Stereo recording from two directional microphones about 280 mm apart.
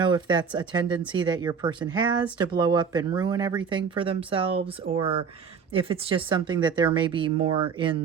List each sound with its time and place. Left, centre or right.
0.0 s speech: centre